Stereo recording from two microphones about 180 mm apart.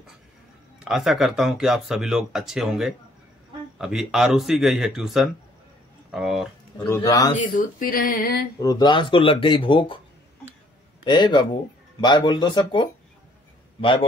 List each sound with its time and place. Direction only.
0.7 s speech: centre (ahead or behind)
7.0 s speech: 20° left (ahead or behind)
7.3 s speech: 50° left (ahead or behind)
8.5 s speech: 20° left (ahead or behind)
11.1 s a man's voice: 25° left (ahead or behind)